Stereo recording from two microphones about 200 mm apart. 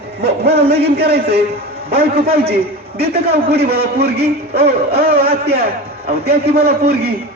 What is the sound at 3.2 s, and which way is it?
A man's voice, 50° right (ahead or behind).